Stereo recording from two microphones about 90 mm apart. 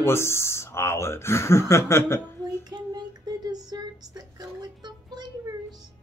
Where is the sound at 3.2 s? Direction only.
45° right (ahead or behind).